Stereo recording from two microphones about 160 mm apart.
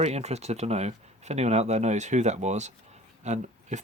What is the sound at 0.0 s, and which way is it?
Speech, 45° right (ahead or behind).